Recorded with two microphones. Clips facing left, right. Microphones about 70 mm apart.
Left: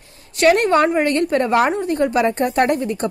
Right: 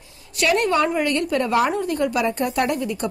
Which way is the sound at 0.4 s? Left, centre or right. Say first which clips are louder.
Left 5 dB; left.